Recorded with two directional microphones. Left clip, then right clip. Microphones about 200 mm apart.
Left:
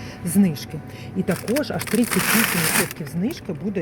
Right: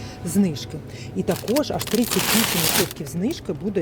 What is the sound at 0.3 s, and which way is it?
Speech, 5° right (ahead or behind).